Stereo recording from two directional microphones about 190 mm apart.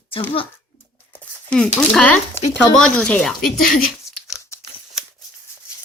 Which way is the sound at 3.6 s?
50° left (ahead or behind).